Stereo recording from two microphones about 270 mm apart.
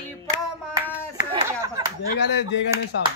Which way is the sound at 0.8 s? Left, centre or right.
Centre.